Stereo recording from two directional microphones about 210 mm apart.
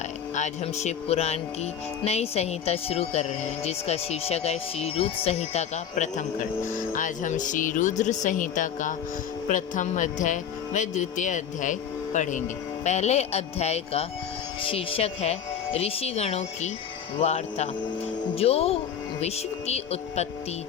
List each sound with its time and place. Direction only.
0.3 s speech: 35° left (ahead or behind)